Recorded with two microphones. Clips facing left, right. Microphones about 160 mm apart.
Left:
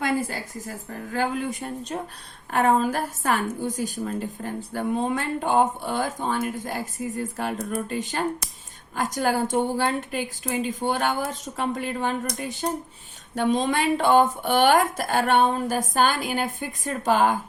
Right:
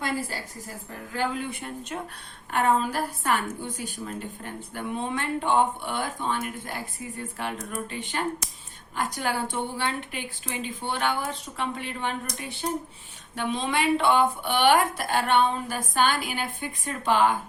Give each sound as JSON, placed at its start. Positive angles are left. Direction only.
{"t": 1.1, "sound": "speech", "side_deg": 40}